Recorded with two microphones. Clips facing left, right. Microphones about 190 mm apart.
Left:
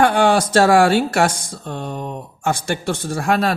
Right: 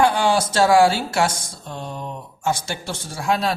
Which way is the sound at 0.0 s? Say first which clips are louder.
Left 3 dB; 55° left (ahead or behind).